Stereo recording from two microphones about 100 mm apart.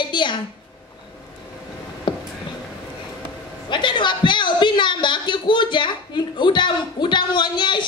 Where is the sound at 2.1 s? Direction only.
50° left (ahead or behind).